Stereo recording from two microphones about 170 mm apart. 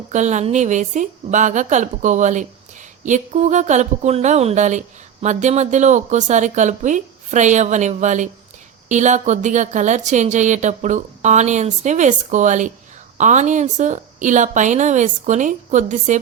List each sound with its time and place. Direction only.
0.1 s a woman's voice: 45° right (ahead or behind)